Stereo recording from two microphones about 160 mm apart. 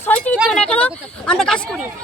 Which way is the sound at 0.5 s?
10° left (ahead or behind).